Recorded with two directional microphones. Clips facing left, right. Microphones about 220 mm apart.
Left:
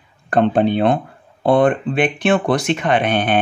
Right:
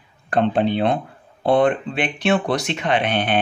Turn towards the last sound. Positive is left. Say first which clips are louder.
# left 3 dB
turn(degrees=50)  # may be behind; listen again after turning